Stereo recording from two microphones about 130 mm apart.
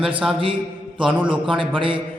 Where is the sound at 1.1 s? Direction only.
40° right (ahead or behind).